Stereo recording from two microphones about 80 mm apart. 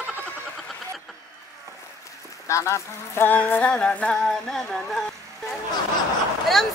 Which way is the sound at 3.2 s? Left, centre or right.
Left.